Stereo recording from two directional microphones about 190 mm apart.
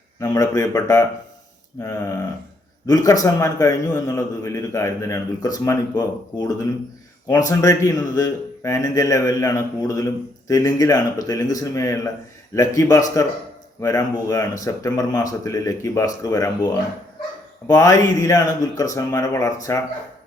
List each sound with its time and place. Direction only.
0.2 s a man's voice: 20° left (ahead or behind)